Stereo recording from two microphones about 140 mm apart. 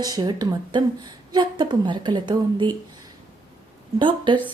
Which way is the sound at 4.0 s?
35° right (ahead or behind).